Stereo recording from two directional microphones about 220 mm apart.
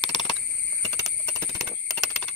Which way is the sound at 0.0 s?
20° left (ahead or behind).